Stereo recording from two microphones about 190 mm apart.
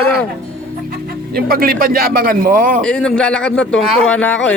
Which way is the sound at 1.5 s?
50° right (ahead or behind).